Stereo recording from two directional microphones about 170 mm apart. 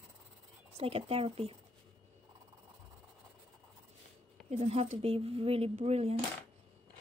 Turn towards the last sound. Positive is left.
turn(degrees=-35)  # may be behind; listen again after turning